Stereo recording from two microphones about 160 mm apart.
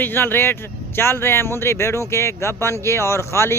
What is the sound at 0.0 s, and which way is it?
Speech, 15° left (ahead or behind).